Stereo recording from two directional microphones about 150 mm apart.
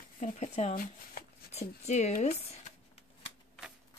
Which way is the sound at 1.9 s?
50° left (ahead or behind).